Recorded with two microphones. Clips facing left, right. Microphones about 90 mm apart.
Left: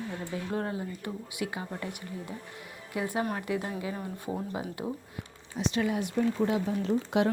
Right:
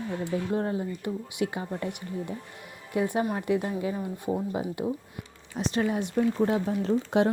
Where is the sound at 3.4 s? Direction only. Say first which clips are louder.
Right 5 dB; 20° right (ahead or behind).